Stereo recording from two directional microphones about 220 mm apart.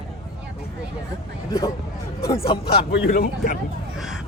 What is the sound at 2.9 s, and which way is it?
Speech, 40° left (ahead or behind).